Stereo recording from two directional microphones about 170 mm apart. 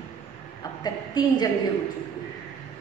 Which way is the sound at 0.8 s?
25° left (ahead or behind).